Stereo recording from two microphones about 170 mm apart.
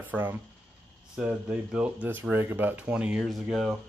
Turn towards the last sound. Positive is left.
turn(degrees=0)  # may be behind; listen again after turning